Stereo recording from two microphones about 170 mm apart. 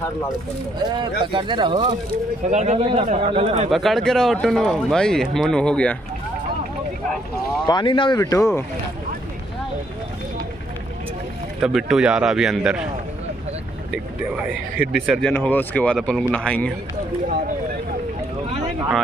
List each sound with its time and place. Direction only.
0.8 s speech: 30° right (ahead or behind)
2.5 s a man's voice: 45° right (ahead or behind)
3.7 s speech: centre (ahead or behind)
7.6 s speech: 25° left (ahead or behind)
11.6 s speech: 5° right (ahead or behind)
14.8 s speech: 65° right (ahead or behind)
15.0 s speech: 5° left (ahead or behind)